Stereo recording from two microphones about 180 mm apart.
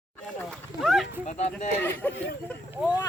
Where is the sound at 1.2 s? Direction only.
40° left (ahead or behind).